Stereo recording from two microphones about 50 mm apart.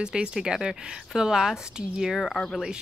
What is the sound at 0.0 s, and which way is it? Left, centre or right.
Speech, centre.